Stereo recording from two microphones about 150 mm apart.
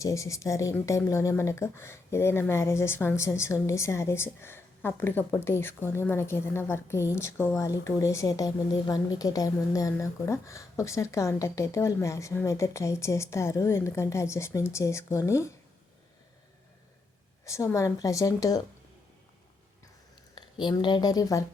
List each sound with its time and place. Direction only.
0.0 s speech: 20° left (ahead or behind)
17.4 s speech: 20° left (ahead or behind)
20.3 s speech: 30° left (ahead or behind)